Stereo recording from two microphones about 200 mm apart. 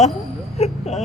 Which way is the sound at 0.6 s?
35° left (ahead or behind).